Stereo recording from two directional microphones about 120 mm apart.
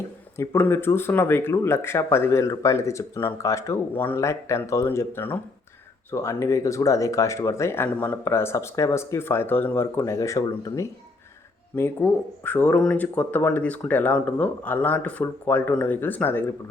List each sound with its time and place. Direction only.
0.3 s speech: 15° left (ahead or behind)
12.4 s speech: 15° left (ahead or behind)